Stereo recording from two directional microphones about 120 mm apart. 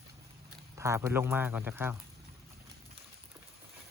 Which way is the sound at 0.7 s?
25° right (ahead or behind).